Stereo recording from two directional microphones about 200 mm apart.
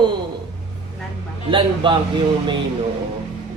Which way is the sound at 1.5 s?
25° right (ahead or behind).